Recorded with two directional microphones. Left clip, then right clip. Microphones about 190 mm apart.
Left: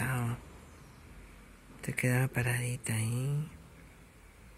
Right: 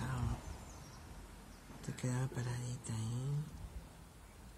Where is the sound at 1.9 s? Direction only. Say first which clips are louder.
Left 12 dB; 25° left (ahead or behind).